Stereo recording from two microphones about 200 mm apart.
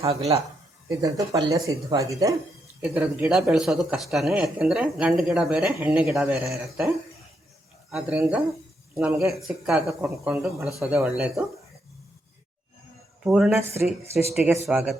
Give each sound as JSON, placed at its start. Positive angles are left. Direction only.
{"t": 0.0, "sound": "speech", "side_deg": -30}
{"t": 0.9, "sound": "speech", "side_deg": -15}
{"t": 13.2, "sound": "speech", "side_deg": 0}